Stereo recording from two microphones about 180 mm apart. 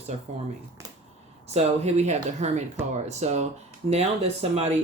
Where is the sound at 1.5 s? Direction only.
35° right (ahead or behind).